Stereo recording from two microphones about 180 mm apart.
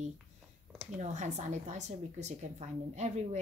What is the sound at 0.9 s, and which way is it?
Speech, 40° right (ahead or behind).